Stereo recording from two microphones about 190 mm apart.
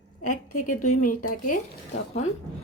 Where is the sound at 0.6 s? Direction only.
40° left (ahead or behind).